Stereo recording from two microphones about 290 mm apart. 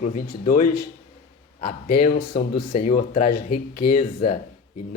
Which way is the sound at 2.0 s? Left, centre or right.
Left.